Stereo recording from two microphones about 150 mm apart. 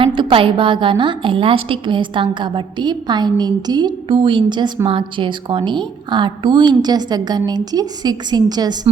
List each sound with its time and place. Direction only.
0.0 s a woman's voice: 35° right (ahead or behind)